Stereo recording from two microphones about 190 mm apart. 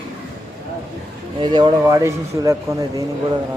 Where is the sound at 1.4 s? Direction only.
25° right (ahead or behind).